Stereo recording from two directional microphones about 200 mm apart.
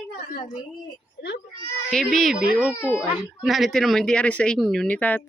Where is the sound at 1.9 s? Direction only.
Centre (ahead or behind).